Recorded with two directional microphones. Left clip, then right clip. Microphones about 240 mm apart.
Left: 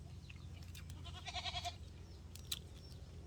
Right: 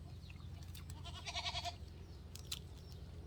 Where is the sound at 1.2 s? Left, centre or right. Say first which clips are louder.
Right 1 dB; right.